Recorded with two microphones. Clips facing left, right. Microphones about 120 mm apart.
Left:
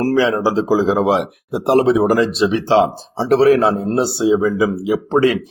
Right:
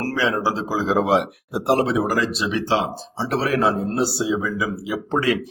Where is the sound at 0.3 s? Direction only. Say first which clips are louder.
Left 7 dB; 15° left (ahead or behind).